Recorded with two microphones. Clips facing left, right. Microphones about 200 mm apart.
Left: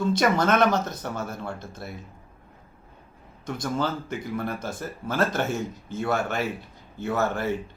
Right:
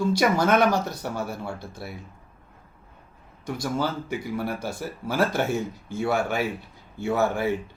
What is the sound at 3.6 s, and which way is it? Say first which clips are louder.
Speech: even; 10° right (ahead or behind).